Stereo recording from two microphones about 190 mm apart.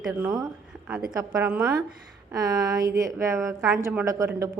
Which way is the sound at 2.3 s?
20° right (ahead or behind).